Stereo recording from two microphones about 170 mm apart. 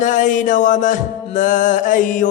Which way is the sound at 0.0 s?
50° left (ahead or behind).